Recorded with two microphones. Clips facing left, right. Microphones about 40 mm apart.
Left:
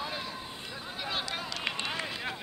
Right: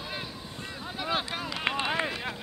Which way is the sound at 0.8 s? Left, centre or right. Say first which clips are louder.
Right 5 dB; centre.